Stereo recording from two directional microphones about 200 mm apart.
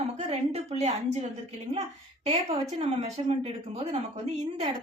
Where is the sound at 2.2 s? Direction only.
35° right (ahead or behind).